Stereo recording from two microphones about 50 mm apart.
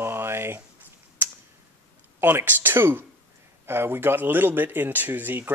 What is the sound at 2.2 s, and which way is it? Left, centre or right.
Speech, right.